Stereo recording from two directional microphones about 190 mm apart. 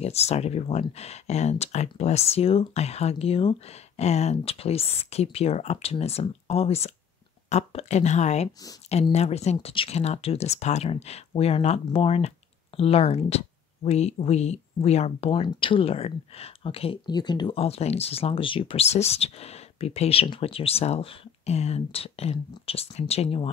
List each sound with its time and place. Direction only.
0.0 s speech: 35° left (ahead or behind)